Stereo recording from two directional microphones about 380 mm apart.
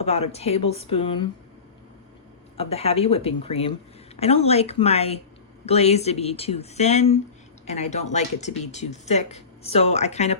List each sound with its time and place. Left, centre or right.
0.0 s speech: centre
2.6 s speech: centre